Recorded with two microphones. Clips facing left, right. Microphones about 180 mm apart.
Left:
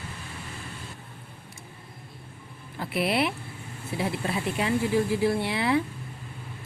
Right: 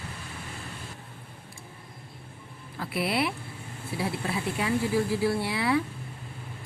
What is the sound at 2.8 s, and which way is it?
Speech, 20° left (ahead or behind).